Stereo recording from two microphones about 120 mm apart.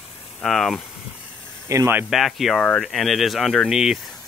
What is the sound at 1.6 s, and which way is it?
Speech, 20° right (ahead or behind).